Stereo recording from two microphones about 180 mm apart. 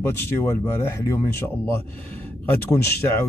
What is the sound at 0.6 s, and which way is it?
Speech, 15° left (ahead or behind).